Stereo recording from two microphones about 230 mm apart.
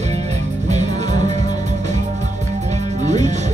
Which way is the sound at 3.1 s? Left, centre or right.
Right.